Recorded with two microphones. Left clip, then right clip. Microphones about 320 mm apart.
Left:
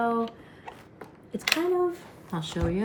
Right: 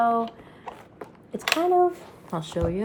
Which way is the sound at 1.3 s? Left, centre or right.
Centre.